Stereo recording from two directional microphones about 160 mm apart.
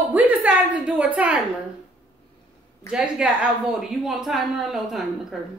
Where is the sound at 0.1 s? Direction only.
10° right (ahead or behind).